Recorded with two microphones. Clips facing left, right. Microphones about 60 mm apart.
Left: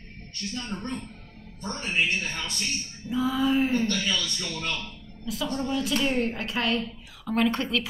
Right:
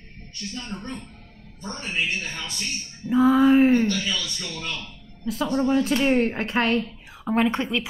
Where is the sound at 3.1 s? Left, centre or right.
Right.